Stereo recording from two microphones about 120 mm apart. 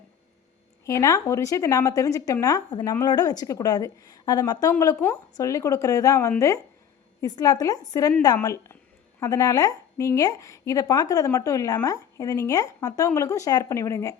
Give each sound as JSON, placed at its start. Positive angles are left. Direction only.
{"t": 0.9, "sound": "a woman's voice", "side_deg": 25}